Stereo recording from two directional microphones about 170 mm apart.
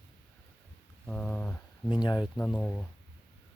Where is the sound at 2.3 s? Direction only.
10° left (ahead or behind).